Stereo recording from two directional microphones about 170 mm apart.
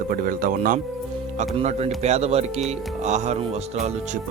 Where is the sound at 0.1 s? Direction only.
55° right (ahead or behind).